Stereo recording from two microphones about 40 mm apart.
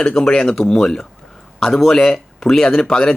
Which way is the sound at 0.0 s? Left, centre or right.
Centre.